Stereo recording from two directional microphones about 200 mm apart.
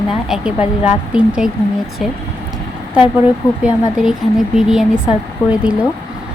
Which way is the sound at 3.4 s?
15° left (ahead or behind).